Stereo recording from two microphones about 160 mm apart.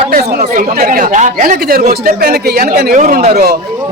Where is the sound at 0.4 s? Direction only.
60° right (ahead or behind).